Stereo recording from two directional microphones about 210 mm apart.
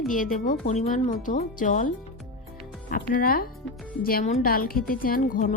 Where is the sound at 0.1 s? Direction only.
40° left (ahead or behind).